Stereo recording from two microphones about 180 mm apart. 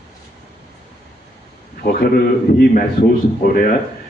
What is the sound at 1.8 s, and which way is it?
A man's voice, 55° left (ahead or behind).